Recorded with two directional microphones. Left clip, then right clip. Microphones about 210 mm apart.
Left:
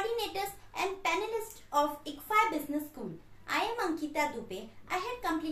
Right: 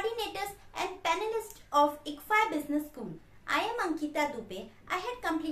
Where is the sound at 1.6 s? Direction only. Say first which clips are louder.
Right 4 dB; 15° right (ahead or behind).